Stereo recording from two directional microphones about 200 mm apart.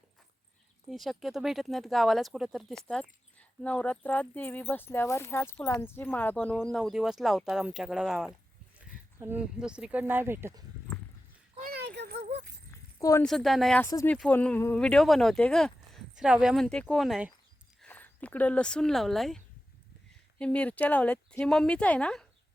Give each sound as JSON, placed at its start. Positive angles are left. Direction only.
{"t": 0.9, "sound": "speech", "side_deg": 0}
{"t": 11.7, "sound": "a sound", "side_deg": -55}
{"t": 12.7, "sound": "keys jangling", "side_deg": 15}
{"t": 13.2, "sound": "speech", "side_deg": 0}
{"t": 13.8, "sound": "speech", "side_deg": 15}
{"t": 17.7, "sound": "speech", "side_deg": 10}
{"t": 20.4, "sound": "speech", "side_deg": 5}